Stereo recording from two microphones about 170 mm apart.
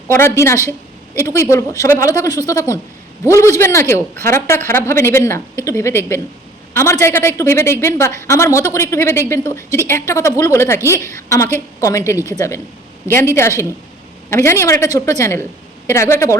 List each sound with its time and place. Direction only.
0.1 s speech: 15° left (ahead or behind)
14.3 s speech: 15° left (ahead or behind)